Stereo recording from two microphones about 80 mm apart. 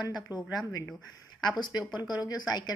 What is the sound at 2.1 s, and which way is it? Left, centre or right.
Speech, left.